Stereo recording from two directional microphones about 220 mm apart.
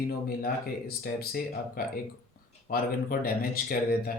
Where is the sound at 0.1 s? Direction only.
45° left (ahead or behind).